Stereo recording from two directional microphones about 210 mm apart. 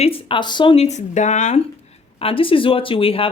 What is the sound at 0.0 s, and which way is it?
Speech, 25° left (ahead or behind).